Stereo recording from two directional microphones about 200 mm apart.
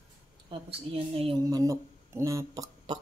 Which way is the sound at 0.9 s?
30° right (ahead or behind).